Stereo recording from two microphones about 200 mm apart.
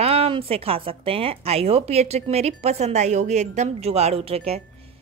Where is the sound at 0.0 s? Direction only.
30° right (ahead or behind).